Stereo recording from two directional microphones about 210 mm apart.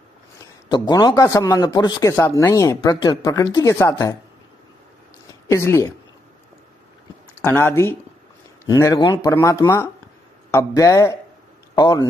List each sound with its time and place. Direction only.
0.7 s speech: 20° left (ahead or behind)
5.5 s speech: 15° left (ahead or behind)
7.4 s speech: 10° left (ahead or behind)